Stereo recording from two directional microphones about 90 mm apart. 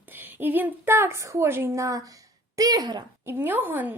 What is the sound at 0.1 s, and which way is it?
A woman's voice, 20° right (ahead or behind).